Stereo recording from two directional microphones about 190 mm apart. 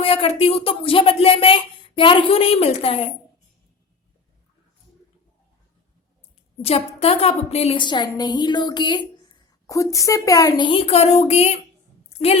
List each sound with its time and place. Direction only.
0.0 s a woman's voice: 30° left (ahead or behind)
6.6 s a woman's voice: 30° left (ahead or behind)